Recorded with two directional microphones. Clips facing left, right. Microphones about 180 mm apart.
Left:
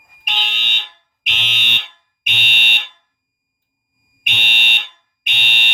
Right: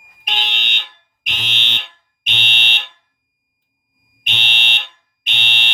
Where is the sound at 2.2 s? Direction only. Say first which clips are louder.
Even; 15° left (ahead or behind).